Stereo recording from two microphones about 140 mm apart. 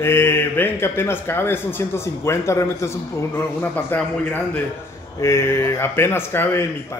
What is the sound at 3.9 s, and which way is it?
Speech, 15° left (ahead or behind).